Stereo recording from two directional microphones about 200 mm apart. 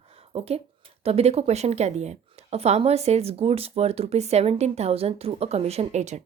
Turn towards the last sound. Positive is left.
turn(degrees=-35)  # may be behind; listen again after turning